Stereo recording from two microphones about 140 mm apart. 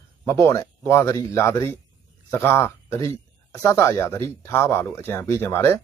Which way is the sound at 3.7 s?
20° left (ahead or behind).